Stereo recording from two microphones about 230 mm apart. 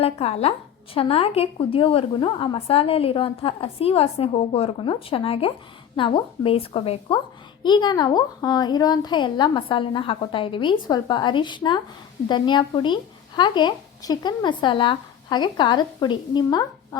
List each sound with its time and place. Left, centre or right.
0.0 s speech: left